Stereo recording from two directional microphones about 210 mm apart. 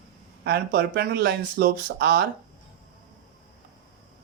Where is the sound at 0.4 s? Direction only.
45° right (ahead or behind).